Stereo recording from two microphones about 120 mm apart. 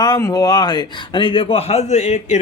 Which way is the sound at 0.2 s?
30° left (ahead or behind).